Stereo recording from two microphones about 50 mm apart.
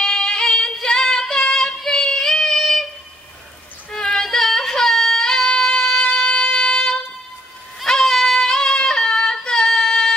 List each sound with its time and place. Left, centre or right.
0.0 s music: centre
1.3 s female singing: centre
1.9 s child singing: centre
3.9 s music: centre
7.8 s child singing: centre